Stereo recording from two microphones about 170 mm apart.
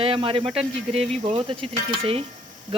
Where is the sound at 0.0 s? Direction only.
30° right (ahead or behind).